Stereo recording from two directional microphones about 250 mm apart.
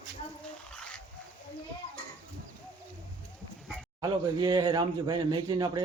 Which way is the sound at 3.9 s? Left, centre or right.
Centre.